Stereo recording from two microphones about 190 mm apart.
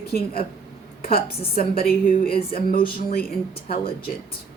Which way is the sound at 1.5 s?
50° left (ahead or behind).